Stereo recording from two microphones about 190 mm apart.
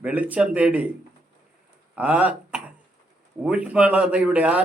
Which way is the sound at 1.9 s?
5° right (ahead or behind).